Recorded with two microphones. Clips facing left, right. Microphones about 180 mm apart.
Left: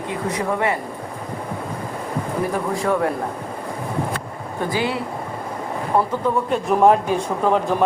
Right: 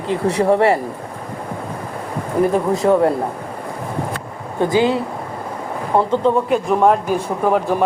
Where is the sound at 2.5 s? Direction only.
25° right (ahead or behind).